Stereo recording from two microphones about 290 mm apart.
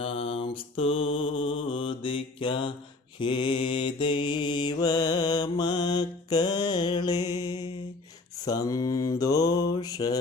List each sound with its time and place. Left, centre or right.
0.0 s mantra: centre
7.3 s music: centre
8.4 s mantra: centre